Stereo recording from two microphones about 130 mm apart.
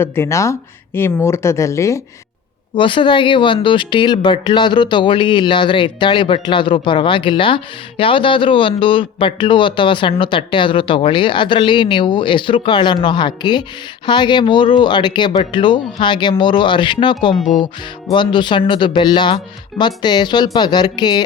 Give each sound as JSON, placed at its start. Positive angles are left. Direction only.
{"t": 0.0, "sound": "speech", "side_deg": 20}
{"t": 2.7, "sound": "speech", "side_deg": 40}